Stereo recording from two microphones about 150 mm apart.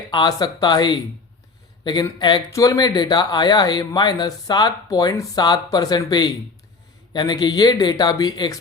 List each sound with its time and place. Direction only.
0.1 s speech: 30° left (ahead or behind)